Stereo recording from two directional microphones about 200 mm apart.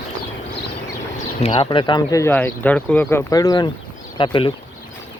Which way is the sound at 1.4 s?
25° left (ahead or behind).